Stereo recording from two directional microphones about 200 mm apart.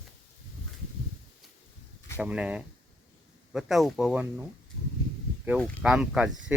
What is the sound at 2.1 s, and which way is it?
Speech, 5° right (ahead or behind).